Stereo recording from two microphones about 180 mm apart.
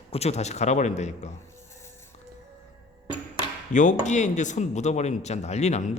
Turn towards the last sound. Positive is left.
turn(degrees=40)  # may be behind; listen again after turning